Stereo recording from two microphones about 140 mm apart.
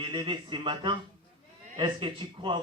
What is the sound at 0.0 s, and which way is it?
Speech, 35° right (ahead or behind).